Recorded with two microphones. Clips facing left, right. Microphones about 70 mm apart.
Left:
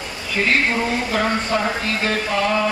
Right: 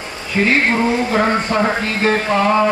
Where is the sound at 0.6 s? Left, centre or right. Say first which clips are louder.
Right 5 dB; right.